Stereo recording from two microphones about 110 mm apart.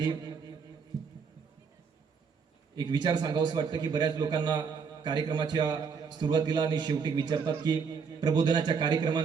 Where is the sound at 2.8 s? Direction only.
40° right (ahead or behind).